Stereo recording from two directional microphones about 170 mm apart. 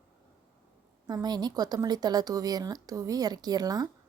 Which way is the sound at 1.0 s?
25° right (ahead or behind).